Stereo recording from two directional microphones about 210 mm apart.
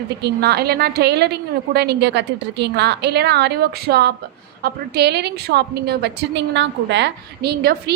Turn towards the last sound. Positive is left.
turn(degrees=-50)  # may be behind; listen again after turning